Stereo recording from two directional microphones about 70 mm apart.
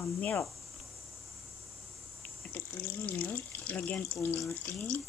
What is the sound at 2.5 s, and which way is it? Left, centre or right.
Speech, left.